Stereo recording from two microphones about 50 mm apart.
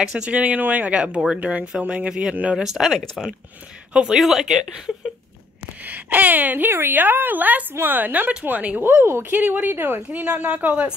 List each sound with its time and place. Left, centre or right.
0.1 s speech: right
0.4 s a woman's voice: right
0.9 s speech: right
5.9 s a woman's voice: right
8.8 s a woman's voice: right
9.3 s speech: right
10.1 s a woman's voice: right